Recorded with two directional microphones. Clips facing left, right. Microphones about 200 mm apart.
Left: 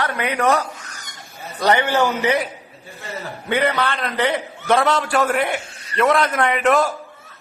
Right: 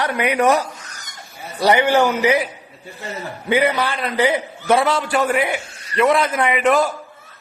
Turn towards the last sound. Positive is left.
turn(degrees=0)  # may be behind; listen again after turning